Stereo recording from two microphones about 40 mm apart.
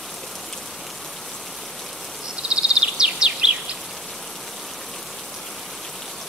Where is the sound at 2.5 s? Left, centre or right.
Right.